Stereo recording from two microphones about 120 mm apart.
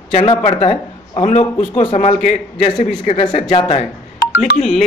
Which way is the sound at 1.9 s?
80° left.